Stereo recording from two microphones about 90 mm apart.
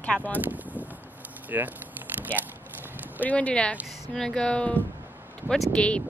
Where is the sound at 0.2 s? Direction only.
20° right (ahead or behind).